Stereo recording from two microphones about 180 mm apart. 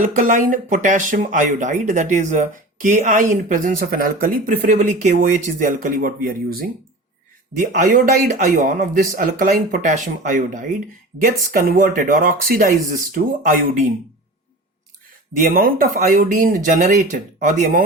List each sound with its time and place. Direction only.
0.0 s speech: 45° right (ahead or behind)
15.5 s speech: 50° right (ahead or behind)